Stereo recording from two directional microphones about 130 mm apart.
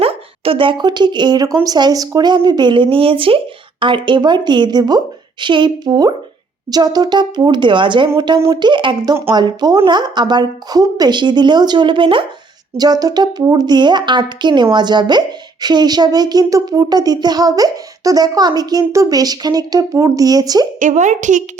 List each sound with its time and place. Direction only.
0.0 s speech: 45° right (ahead or behind)
12.7 s speech: 30° right (ahead or behind)
15.6 s a sound: 30° right (ahead or behind)
20.7 s a woman's voice: 75° right (ahead or behind)